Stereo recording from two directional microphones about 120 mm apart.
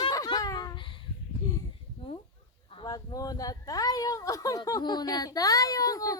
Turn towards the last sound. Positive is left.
turn(degrees=30)  # may be behind; listen again after turning